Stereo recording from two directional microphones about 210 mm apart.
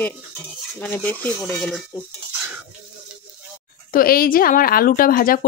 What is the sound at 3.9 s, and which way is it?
A woman's voice, 45° left (ahead or behind).